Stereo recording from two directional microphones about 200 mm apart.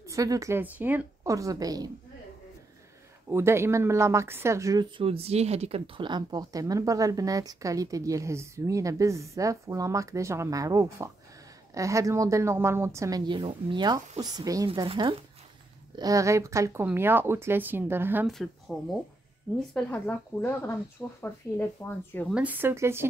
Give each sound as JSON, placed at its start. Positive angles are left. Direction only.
{"t": 0.0, "sound": "speech", "side_deg": -15}
{"t": 3.3, "sound": "speech", "side_deg": -15}
{"t": 18.3, "sound": "speech", "side_deg": 0}
{"t": 22.3, "sound": "speech", "side_deg": -10}